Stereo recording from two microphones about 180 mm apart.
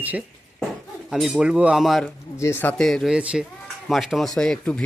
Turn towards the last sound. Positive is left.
turn(degrees=5)  # may be behind; listen again after turning